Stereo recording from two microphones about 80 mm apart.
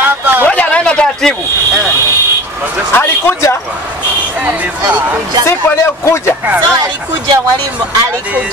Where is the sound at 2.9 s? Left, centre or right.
Left.